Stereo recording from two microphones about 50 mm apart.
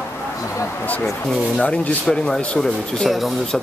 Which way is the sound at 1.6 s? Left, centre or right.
Left.